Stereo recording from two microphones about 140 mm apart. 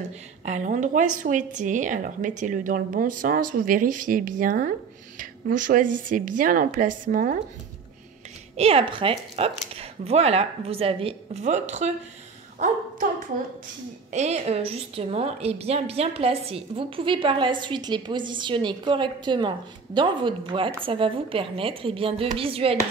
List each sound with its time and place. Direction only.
0.5 s speech: 60° right (ahead or behind); by 7.3 s 75° right (ahead or behind)
8.5 s speech: 45° right (ahead or behind)
12.5 s speech: 65° right (ahead or behind)
14.1 s a woman's voice: 50° right (ahead or behind)